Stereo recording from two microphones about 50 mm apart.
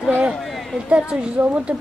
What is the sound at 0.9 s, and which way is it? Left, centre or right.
Speech, right.